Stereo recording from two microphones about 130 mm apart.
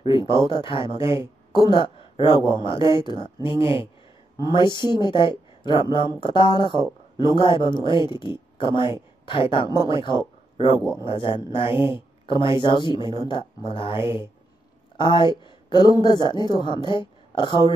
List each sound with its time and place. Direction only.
0.0 s speech: 40° left (ahead or behind)